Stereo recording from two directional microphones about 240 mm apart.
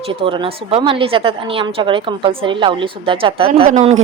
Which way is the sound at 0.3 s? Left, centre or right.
Right.